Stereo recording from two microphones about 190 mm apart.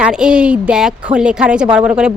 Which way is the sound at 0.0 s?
5° right (ahead or behind).